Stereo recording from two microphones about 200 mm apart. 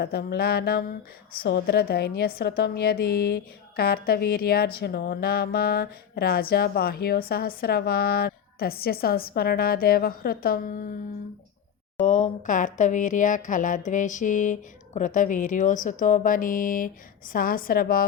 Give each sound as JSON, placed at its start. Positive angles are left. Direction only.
{"t": 0.0, "sound": "speech", "side_deg": 50}
{"t": 12.0, "sound": "speech", "side_deg": 35}